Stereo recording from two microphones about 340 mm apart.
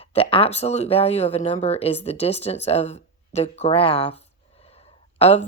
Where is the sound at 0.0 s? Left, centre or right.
Centre.